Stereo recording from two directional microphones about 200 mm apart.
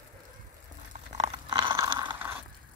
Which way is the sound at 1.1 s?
25° right (ahead or behind).